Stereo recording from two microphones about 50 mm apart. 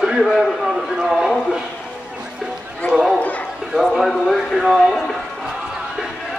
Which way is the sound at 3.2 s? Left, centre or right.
Left.